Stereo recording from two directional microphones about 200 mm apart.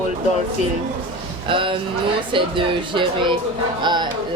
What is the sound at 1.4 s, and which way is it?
Speech, 25° right (ahead or behind).